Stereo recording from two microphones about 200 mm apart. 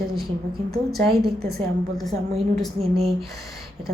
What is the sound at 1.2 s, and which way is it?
Speech, 50° right (ahead or behind).